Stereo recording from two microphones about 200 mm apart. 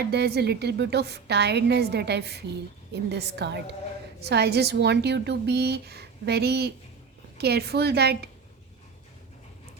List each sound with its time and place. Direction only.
0.0 s a woman's voice: 55° right (ahead or behind)